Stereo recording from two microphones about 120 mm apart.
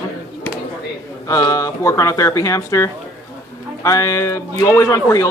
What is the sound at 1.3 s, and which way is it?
A man's voice, 30° left (ahead or behind).